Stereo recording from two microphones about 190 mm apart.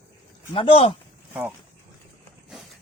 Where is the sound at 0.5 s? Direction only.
30° left (ahead or behind).